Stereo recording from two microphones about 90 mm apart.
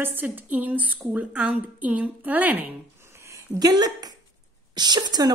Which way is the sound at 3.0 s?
30° right (ahead or behind).